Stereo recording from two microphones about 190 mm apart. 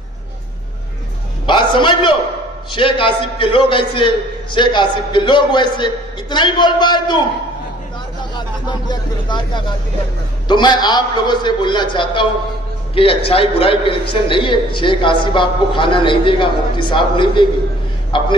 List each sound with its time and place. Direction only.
1.4 s a sound: 25° left (ahead or behind)
2.7 s a man's voice: 25° left (ahead or behind)
8.4 s a man's voice: 25° left (ahead or behind)